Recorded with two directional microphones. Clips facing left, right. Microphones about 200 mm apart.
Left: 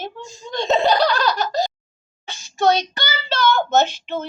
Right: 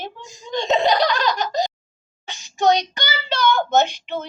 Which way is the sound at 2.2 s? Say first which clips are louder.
Even; 15° right (ahead or behind).